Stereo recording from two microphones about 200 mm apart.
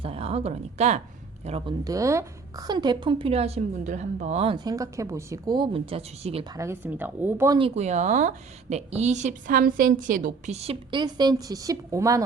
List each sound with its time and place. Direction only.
0.0 s a woman's voice: 30° right (ahead or behind)
1.8 s a woman's voice: 15° right (ahead or behind)
6.5 s speech: 15° right (ahead or behind)
7.6 s speech: 35° right (ahead or behind); by 12.2 s 15° right (ahead or behind)